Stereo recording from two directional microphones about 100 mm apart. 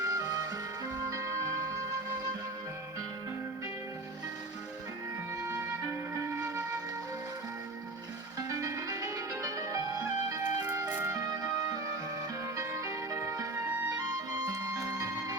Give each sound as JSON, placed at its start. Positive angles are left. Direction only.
{"t": 0.0, "sound": "music", "side_deg": -40}
{"t": 5.5, "sound": "flute", "side_deg": -25}
{"t": 8.4, "sound": "music", "side_deg": -35}